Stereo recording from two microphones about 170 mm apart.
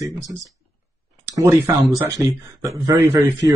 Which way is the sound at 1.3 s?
20° right (ahead or behind).